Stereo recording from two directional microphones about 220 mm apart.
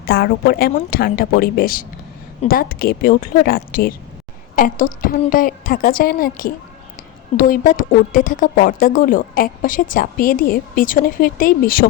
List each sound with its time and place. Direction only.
0.0 s a woman's voice: 45° left (ahead or behind)